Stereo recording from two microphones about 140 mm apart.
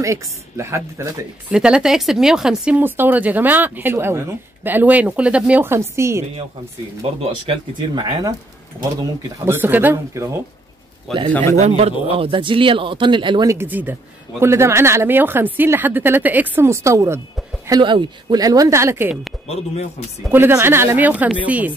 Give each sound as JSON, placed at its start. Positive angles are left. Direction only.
{"t": 0.0, "sound": "speech", "side_deg": -20}
{"t": 1.5, "sound": "speech", "side_deg": -5}
{"t": 7.0, "sound": "speech", "side_deg": -40}
{"t": 9.4, "sound": "speech", "side_deg": -15}
{"t": 11.1, "sound": "speech", "side_deg": 0}
{"t": 11.5, "sound": "speech", "side_deg": -50}
{"t": 13.5, "sound": "speech", "side_deg": -15}
{"t": 17.6, "sound": "speech", "side_deg": -30}
{"t": 19.4, "sound": "speech", "side_deg": 45}
{"t": 20.2, "sound": "speech", "side_deg": -15}